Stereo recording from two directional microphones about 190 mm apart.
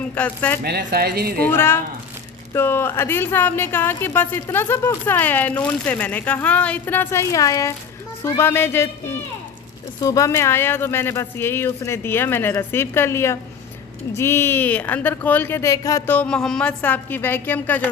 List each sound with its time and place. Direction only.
0.1 s speech: 10° left (ahead or behind)
0.6 s speech: 60° right (ahead or behind)
1.5 s speech: 10° left (ahead or behind)
10.0 s speech: 15° left (ahead or behind)